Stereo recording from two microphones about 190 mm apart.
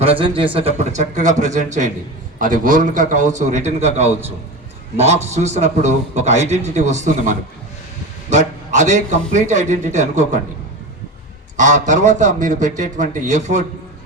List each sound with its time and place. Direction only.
0.0 s a man's voice: 30° right (ahead or behind)
11.5 s a man's voice: 40° right (ahead or behind)